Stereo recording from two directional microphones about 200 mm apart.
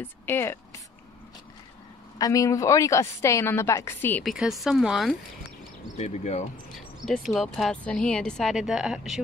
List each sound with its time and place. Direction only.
0.0 s speech: 10° left (ahead or behind)
2.1 s a woman's voice: 15° left (ahead or behind)
4.2 s speech: centre (ahead or behind)
5.9 s speech: 35° left (ahead or behind)
7.1 s speech: centre (ahead or behind)